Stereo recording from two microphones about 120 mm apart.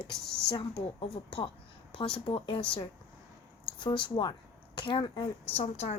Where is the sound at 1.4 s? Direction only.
50° left (ahead or behind).